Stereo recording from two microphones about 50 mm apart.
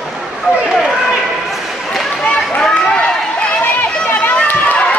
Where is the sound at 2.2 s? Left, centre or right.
Left.